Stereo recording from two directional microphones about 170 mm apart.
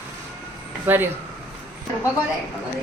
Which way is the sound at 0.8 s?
10° right (ahead or behind).